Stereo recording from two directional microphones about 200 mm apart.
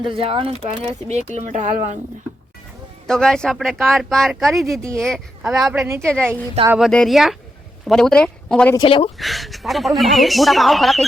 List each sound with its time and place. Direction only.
0.0 s speech: 25° right (ahead or behind)
3.1 s a woman's voice: 5° left (ahead or behind)
5.8 s a woman's voice: 15° right (ahead or behind)
6.7 s a woman's voice: centre (ahead or behind)
8.7 s speech: 25° left (ahead or behind)
9.1 s a woman's voice: centre (ahead or behind)